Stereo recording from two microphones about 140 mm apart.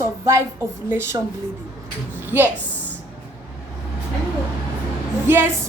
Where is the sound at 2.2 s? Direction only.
15° right (ahead or behind).